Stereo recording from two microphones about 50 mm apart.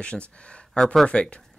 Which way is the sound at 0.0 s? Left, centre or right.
Left.